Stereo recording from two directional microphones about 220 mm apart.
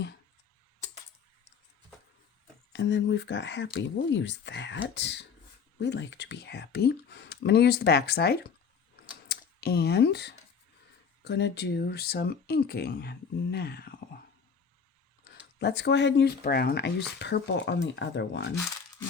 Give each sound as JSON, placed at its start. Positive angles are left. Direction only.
{"t": 2.7, "sound": "speech", "side_deg": 55}
{"t": 15.5, "sound": "speech", "side_deg": 50}